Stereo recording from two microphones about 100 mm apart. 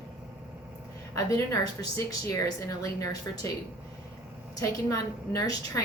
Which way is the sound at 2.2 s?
30° left (ahead or behind).